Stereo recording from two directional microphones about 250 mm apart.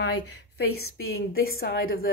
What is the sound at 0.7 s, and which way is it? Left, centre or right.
Speech, left.